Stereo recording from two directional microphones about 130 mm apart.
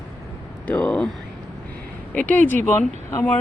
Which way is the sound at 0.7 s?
10° left (ahead or behind).